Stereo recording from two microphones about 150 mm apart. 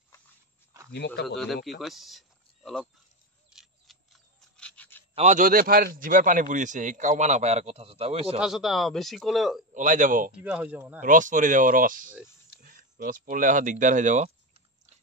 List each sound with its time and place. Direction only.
1.2 s speech: centre (ahead or behind)
3.5 s a sound: centre (ahead or behind)
5.1 s a man's voice: 55° right (ahead or behind)
8.4 s speech: 5° right (ahead or behind)
9.8 s a man's voice: 55° right (ahead or behind)
10.3 s speech: 10° right (ahead or behind)
11.0 s a man's voice: 60° right (ahead or behind)